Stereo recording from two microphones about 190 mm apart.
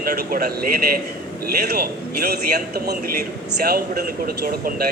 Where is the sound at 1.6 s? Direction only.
55° right (ahead or behind).